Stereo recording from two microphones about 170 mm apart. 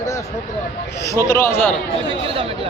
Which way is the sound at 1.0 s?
20° left (ahead or behind).